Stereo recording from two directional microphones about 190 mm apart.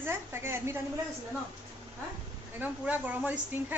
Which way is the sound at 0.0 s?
10° right (ahead or behind).